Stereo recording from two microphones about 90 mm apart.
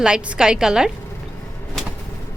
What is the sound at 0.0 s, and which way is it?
Speech, 10° right (ahead or behind).